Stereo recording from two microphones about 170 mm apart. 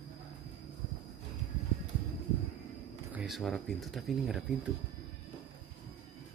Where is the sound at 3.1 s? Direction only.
Centre (ahead or behind).